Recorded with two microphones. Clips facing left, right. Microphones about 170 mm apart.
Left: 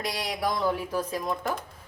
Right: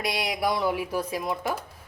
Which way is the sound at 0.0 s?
10° right (ahead or behind).